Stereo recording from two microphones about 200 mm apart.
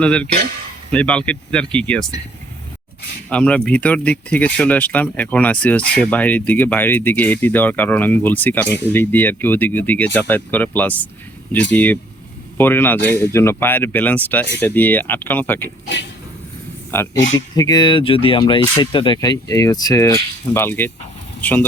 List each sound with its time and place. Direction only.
0.0 s speech: 5° left (ahead or behind)
3.2 s speech: 5° left (ahead or behind)
17.2 s speech: 70° left (ahead or behind)
17.5 s speech: 20° left (ahead or behind)